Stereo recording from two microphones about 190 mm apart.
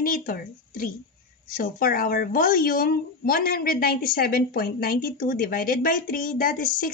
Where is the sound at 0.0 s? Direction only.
50° left (ahead or behind).